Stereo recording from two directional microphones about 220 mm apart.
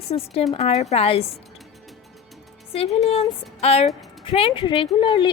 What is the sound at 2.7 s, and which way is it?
A woman's voice, 30° left (ahead or behind).